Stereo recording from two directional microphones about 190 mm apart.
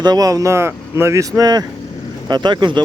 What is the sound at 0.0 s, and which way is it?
Speech, 20° right (ahead or behind).